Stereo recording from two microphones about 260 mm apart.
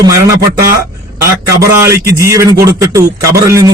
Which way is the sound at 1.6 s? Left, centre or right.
Centre.